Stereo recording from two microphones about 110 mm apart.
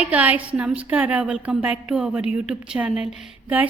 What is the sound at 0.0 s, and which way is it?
A woman's voice, 15° right (ahead or behind).